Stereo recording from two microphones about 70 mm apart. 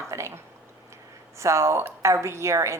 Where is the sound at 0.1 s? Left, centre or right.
Right.